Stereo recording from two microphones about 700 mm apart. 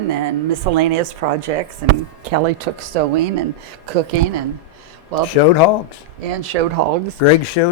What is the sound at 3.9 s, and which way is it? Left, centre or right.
Speech, right.